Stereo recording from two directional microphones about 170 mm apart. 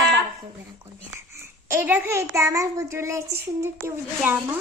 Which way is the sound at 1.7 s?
10° right (ahead or behind).